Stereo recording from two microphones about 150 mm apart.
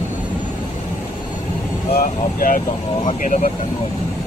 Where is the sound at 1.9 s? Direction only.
70° left (ahead or behind).